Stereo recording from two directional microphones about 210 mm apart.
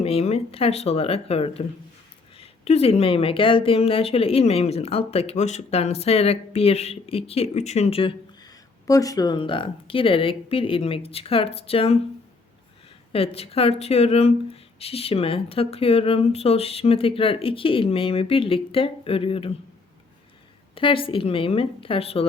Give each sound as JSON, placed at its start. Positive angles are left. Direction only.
{"t": 0.0, "sound": "speech", "side_deg": 30}
{"t": 13.1, "sound": "speech", "side_deg": 30}
{"t": 20.7, "sound": "speech", "side_deg": 25}